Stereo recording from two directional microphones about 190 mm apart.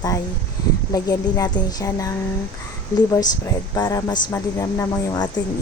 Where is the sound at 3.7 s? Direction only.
20° left (ahead or behind).